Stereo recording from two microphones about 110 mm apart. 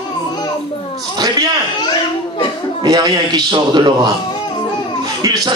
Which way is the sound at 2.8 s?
40° right (ahead or behind).